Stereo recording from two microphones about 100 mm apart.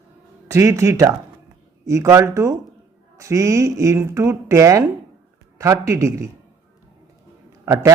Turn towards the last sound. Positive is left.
turn(degrees=-30)  # may be behind; listen again after turning